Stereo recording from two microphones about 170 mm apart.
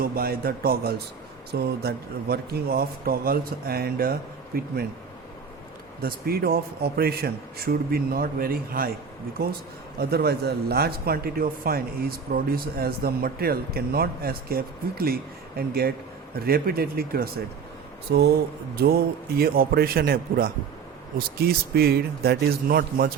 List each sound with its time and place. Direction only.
0.0 s a man's voice: 65° right (ahead or behind)
6.0 s a man's voice: 65° right (ahead or behind)